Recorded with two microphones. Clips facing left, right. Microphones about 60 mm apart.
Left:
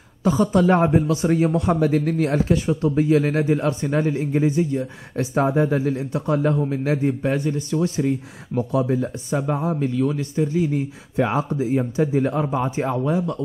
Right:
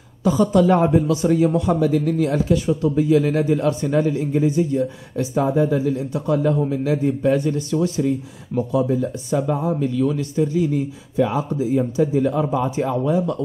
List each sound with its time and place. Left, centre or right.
0.2 s speech: left
5.1 s speech: left
6.2 s speech: left
7.1 s speech: left
7.8 s speech: left
9.3 s speech: left
11.1 s speech: left